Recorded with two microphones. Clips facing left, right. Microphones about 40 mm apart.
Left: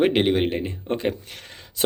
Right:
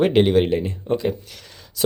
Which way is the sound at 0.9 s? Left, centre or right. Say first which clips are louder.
Right 3 dB; left.